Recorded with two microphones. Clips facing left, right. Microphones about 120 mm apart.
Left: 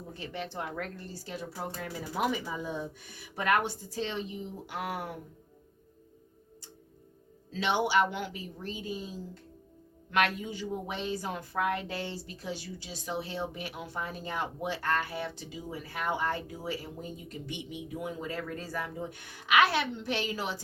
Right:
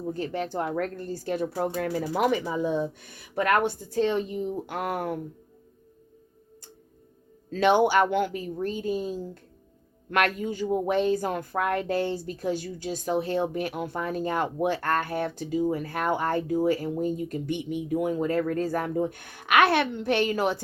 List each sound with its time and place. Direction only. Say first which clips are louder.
0.1 s speech: right 9 dB; 45° right (ahead or behind)
7.5 s speech: right 7 dB; 50° right (ahead or behind)